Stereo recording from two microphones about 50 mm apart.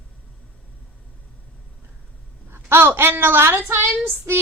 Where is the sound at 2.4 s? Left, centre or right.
Right.